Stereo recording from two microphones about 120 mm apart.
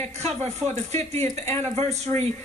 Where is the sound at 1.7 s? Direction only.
65° right (ahead or behind).